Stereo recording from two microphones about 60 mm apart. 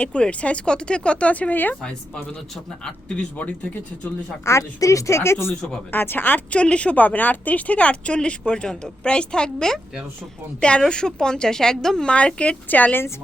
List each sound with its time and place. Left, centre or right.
0.0 s a woman's voice: left
3.3 s a woman's voice: left
4.4 s speech: left
5.9 s speech: left
6.5 s a woman's voice: centre
12.1 s a woman's voice: centre